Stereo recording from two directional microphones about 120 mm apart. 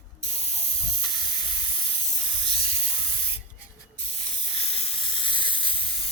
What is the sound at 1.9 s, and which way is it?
Spray, 45° left (ahead or behind).